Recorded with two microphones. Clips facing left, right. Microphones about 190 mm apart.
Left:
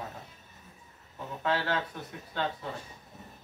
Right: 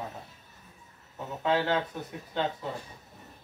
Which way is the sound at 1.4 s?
20° right (ahead or behind).